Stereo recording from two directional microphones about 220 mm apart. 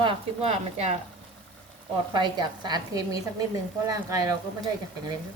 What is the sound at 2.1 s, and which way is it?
Speech, 20° right (ahead or behind).